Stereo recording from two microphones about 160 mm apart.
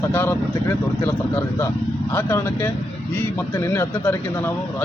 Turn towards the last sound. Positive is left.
turn(degrees=15)  # may be behind; listen again after turning